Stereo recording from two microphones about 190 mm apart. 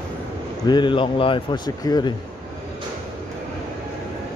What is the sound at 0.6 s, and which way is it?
A man's voice, 25° left (ahead or behind).